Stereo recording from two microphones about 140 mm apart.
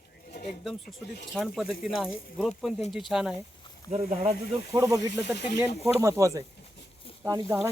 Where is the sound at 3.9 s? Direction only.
50° right (ahead or behind).